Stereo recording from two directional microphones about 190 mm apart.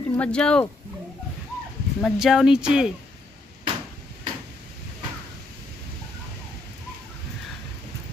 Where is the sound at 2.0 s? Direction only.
Centre (ahead or behind).